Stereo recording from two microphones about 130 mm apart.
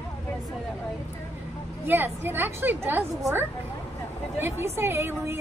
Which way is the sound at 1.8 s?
15° right (ahead or behind).